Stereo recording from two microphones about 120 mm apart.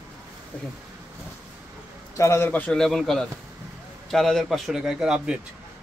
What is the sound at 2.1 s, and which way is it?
A man's voice, 25° left (ahead or behind).